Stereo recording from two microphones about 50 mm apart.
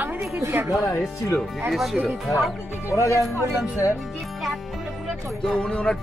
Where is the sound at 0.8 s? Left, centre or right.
Left.